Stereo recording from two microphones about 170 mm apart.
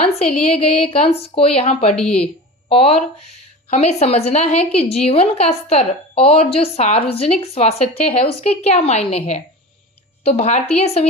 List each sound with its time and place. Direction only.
0.0 s a woman's voice: 35° left (ahead or behind)
2.0 s a woman's voice: 5° left (ahead or behind)
2.6 s a woman's voice: 35° left (ahead or behind)